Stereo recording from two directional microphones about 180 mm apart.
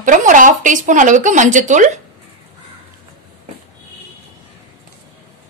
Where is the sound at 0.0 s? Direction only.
45° right (ahead or behind).